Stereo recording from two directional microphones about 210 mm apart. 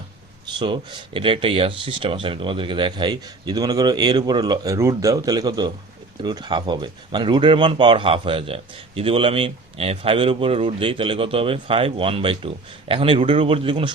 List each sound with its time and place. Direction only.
0.4 s speech: 20° right (ahead or behind)